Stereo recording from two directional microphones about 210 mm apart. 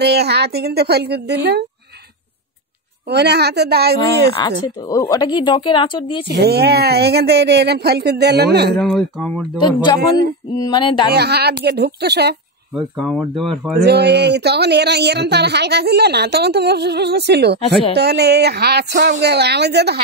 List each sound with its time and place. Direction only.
0.0 s speech: 50° right (ahead or behind)
3.1 s speech: 50° right (ahead or behind)
4.4 s speech: 20° left (ahead or behind)
6.3 s speech: 50° right (ahead or behind)
8.7 s speech: 5° left (ahead or behind)
10.6 s speech: 20° left (ahead or behind)
11.1 s speech: 50° right (ahead or behind)
12.7 s speech: 5° left (ahead or behind)
13.8 s speech: 50° right (ahead or behind)